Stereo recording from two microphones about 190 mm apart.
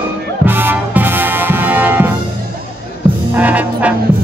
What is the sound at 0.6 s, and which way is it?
Music, 10° right (ahead or behind).